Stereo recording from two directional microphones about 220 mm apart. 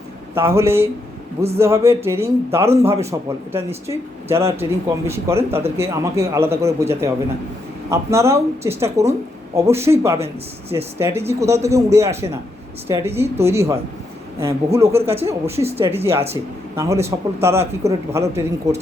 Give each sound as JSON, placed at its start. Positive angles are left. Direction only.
{"t": 0.3, "sound": "speech", "side_deg": -10}